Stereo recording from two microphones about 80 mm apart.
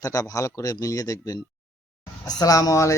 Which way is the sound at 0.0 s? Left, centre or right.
Left.